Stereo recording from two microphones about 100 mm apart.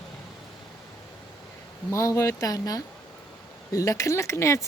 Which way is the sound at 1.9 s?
30° left (ahead or behind).